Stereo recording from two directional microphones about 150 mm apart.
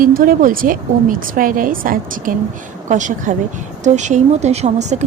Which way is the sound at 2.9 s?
55° right (ahead or behind).